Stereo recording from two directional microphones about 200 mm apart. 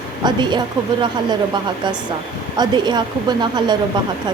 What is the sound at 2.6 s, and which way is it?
A woman's voice, 20° right (ahead or behind).